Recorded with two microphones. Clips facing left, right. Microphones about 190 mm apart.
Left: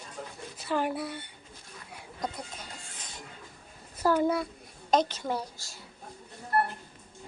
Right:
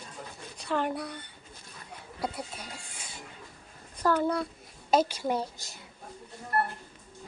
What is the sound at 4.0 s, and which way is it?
Speech, 10° left (ahead or behind).